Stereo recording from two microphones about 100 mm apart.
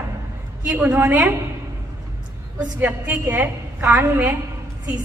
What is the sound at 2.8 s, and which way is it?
A woman's voice, 15° right (ahead or behind).